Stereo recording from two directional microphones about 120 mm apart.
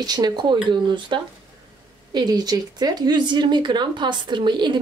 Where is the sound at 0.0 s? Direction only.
35° right (ahead or behind).